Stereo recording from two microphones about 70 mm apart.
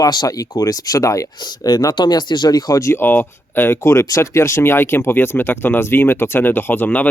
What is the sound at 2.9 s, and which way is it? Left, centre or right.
Speech, left.